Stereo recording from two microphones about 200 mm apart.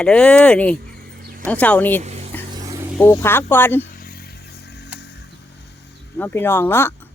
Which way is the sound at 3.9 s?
50° left (ahead or behind).